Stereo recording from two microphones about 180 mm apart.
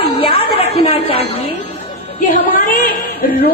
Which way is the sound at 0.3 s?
35° left (ahead or behind).